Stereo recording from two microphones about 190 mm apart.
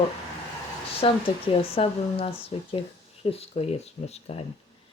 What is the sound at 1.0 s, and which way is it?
A woman's voice, 30° left (ahead or behind).